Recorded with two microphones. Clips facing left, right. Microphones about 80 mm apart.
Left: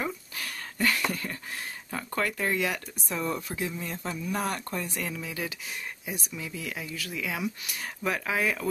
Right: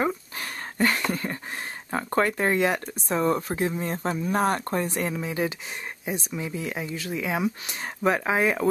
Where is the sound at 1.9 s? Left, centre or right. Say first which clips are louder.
Right 7 dB; right.